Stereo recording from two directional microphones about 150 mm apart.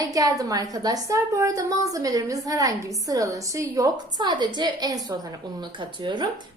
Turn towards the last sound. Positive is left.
turn(degrees=-30)  # may be behind; listen again after turning